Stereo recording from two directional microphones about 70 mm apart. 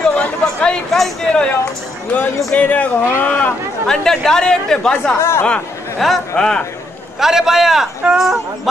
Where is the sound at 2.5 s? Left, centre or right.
Left.